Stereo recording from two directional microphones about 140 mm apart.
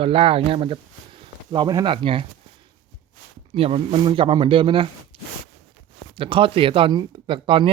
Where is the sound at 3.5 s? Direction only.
45° right (ahead or behind).